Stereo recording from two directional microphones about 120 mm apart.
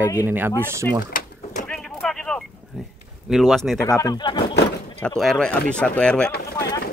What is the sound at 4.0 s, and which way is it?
Speech, 35° left (ahead or behind).